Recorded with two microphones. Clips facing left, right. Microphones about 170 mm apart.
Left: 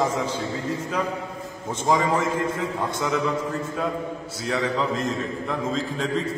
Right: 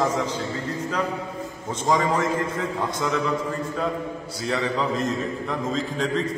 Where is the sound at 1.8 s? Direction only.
5° left (ahead or behind).